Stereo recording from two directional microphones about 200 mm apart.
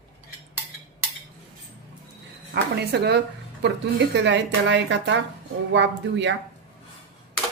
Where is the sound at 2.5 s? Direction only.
55° right (ahead or behind).